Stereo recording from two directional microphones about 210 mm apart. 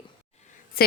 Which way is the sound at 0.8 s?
45° left (ahead or behind).